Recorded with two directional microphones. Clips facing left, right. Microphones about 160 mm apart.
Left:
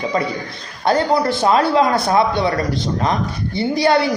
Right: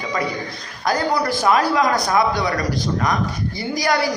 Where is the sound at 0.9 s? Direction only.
25° left (ahead or behind).